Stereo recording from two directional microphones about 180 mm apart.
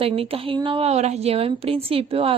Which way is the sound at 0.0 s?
30° right (ahead or behind).